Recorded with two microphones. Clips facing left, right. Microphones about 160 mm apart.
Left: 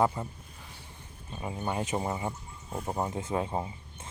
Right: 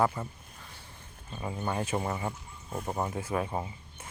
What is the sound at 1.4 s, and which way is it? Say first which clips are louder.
Speech: even; 15° left (ahead or behind).